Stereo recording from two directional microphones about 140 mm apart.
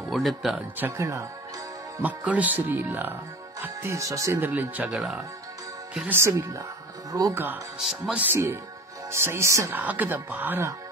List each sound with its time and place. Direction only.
0.1 s speech: centre (ahead or behind)
0.7 s speech: 15° right (ahead or behind)
2.0 s speech: 10° right (ahead or behind)
5.9 s speech: 15° right (ahead or behind)
7.8 s speech: 5° right (ahead or behind)